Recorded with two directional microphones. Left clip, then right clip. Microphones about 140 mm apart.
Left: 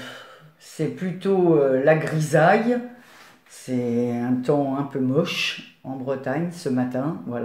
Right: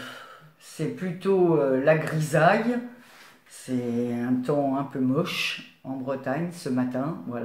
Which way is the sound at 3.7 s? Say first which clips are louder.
Left 4 dB; 25° left (ahead or behind).